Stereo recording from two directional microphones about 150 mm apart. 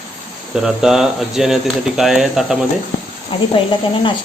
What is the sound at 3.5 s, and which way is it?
Speech, 35° left (ahead or behind).